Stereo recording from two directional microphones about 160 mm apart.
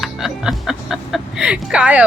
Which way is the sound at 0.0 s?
Centre (ahead or behind).